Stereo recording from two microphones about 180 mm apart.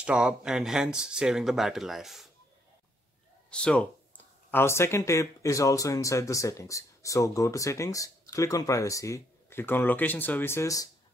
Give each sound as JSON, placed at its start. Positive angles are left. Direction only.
{"t": 0.0, "sound": "speech", "side_deg": -5}
{"t": 3.4, "sound": "speech", "side_deg": 5}